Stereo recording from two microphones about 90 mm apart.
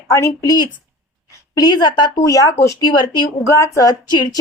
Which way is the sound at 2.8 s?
60° left (ahead or behind).